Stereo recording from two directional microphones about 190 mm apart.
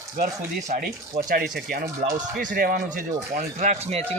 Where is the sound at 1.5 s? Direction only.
45° right (ahead or behind).